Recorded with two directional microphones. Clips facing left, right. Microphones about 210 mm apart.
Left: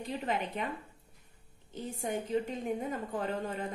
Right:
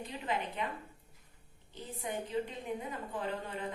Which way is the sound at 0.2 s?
45° left (ahead or behind).